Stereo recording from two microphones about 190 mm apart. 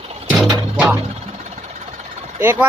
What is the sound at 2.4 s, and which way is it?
Speech, 10° right (ahead or behind).